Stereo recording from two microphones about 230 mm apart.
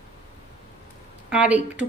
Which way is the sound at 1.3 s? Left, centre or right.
Centre.